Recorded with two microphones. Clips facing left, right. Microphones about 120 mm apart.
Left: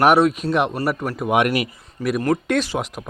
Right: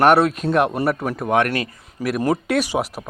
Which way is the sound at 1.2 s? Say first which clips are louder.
Left 2 dB; 10° left (ahead or behind).